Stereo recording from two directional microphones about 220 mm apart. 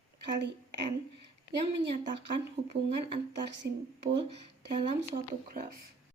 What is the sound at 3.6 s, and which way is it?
Speech, 50° right (ahead or behind).